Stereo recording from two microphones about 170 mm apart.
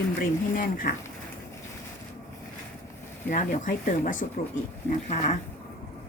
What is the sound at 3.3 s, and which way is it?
Speech, 45° left (ahead or behind).